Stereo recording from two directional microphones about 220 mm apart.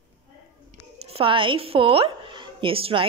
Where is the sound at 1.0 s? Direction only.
25° right (ahead or behind).